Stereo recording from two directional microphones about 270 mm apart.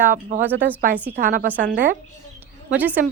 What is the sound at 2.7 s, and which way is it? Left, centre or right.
Speech, centre.